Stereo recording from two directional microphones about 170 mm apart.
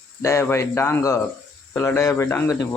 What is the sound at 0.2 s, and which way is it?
Speech, 15° left (ahead or behind).